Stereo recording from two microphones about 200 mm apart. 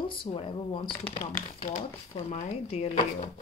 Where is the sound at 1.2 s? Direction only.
35° left (ahead or behind).